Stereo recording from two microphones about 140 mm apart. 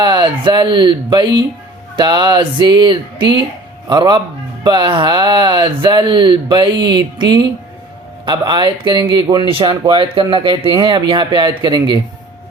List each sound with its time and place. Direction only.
0.0 s speech: 35° right (ahead or behind)